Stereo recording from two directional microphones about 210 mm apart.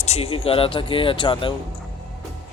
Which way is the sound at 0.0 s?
30° left (ahead or behind).